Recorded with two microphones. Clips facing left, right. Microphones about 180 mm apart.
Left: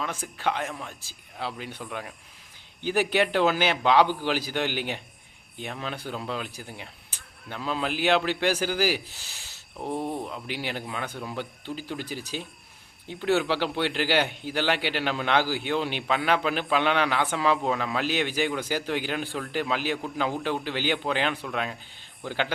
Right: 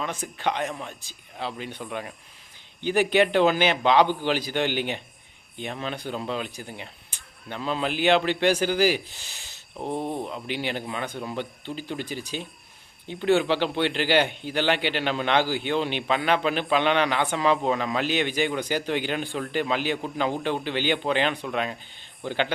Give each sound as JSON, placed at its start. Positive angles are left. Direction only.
{"t": 0.0, "sound": "a man's voice", "side_deg": 5}
{"t": 9.8, "sound": "a sound", "side_deg": -20}
{"t": 10.2, "sound": "a man's voice", "side_deg": 5}